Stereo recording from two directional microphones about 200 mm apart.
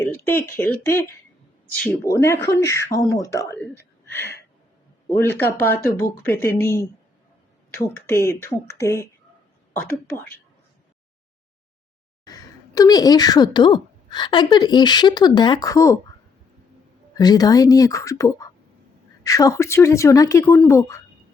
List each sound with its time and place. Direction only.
0.3 s speech: 10° left (ahead or behind)
5.1 s speech: 10° left (ahead or behind)
12.2 s a woman's voice: 20° left (ahead or behind)
17.2 s speech: 20° left (ahead or behind)